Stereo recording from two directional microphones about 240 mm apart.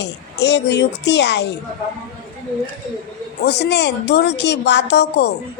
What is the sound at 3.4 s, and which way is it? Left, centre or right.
A woman's voice, left.